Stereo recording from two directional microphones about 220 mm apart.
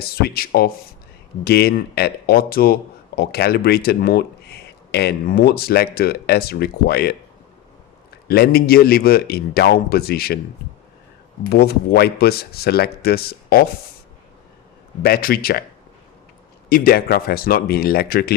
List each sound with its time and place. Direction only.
0.0 s speech: 45° left (ahead or behind)
8.3 s speech: 45° left (ahead or behind)
11.4 s speech: 45° left (ahead or behind)
15.0 s speech: 45° left (ahead or behind)
16.6 s speech: 40° left (ahead or behind)